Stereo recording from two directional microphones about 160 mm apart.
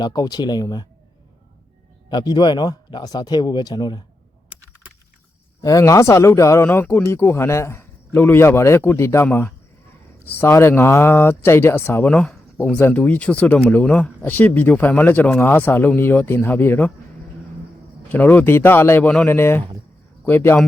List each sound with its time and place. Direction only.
0.0 s speech: 25° left (ahead or behind)
2.0 s speech: 25° left (ahead or behind)
5.6 s speech: 20° left (ahead or behind)
18.1 s speech: 10° left (ahead or behind)